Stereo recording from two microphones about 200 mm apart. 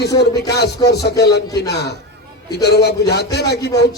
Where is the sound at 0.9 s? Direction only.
55° left (ahead or behind).